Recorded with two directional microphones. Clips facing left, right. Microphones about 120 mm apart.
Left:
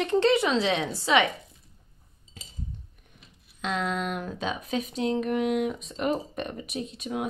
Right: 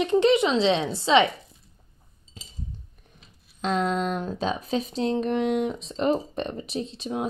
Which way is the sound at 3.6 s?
35° right (ahead or behind).